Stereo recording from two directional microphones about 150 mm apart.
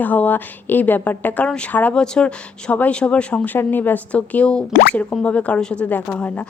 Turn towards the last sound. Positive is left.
turn(degrees=10)  # may be behind; listen again after turning